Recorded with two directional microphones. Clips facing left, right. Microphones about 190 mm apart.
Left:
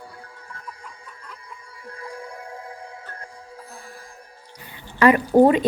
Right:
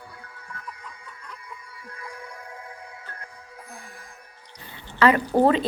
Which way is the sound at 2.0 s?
30° left (ahead or behind).